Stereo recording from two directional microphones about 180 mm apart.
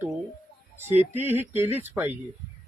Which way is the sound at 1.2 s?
10° right (ahead or behind).